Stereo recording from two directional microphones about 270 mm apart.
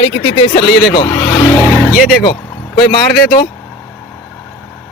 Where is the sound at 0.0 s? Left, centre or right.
Left.